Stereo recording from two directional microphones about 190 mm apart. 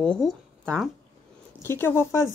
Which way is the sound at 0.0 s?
5° left (ahead or behind).